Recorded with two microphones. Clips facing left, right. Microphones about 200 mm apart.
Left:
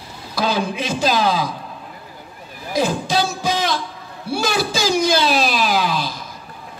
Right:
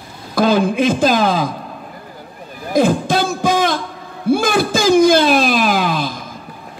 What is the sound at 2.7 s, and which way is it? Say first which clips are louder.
Music: right 5 dB; 50° right (ahead or behind).